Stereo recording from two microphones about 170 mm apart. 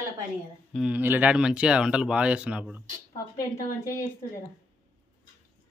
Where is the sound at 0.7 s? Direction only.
5° right (ahead or behind).